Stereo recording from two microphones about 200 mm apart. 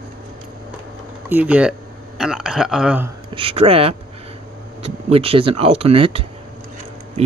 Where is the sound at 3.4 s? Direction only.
30° right (ahead or behind).